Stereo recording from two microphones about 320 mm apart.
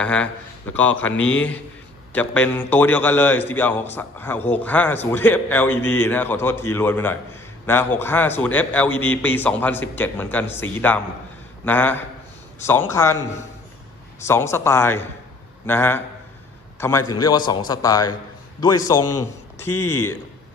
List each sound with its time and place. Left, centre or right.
0.0 s a man's voice: centre
19.1 s speech: centre
19.7 s speech: left